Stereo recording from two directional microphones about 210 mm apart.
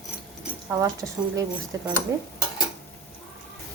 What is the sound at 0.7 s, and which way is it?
Speech, 15° right (ahead or behind).